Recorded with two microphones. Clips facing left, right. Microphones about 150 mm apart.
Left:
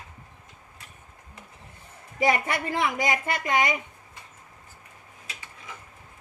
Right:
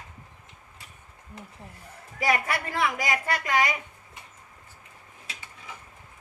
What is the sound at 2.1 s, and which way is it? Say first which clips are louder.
A woman's voice: left 2 dB; 25° left (ahead or behind).